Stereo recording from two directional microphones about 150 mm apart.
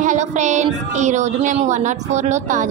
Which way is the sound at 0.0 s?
55° right (ahead or behind).